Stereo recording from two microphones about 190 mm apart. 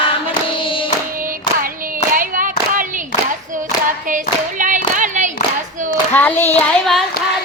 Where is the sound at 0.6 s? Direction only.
25° left (ahead or behind).